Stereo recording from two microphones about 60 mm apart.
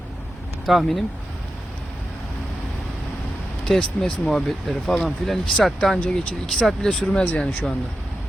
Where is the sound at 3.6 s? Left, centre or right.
Centre.